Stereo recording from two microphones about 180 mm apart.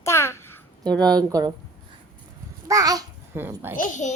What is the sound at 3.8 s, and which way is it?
Speech, 45° left (ahead or behind).